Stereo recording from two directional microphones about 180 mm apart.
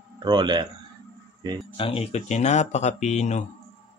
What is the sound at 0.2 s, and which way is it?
Speech, 25° right (ahead or behind).